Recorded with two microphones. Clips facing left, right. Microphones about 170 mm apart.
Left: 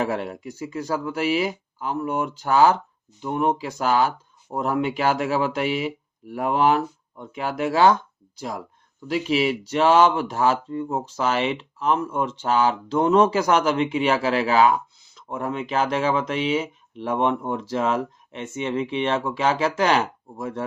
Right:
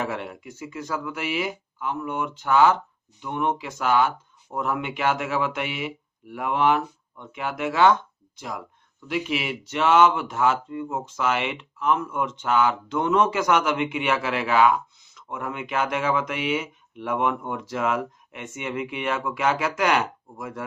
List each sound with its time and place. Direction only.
0.0 s speech: 35° left (ahead or behind)